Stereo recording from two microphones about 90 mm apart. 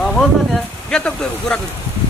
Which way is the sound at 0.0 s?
5° left (ahead or behind).